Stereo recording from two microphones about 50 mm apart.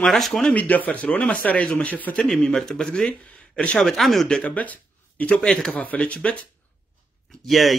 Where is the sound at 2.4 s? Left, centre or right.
Centre.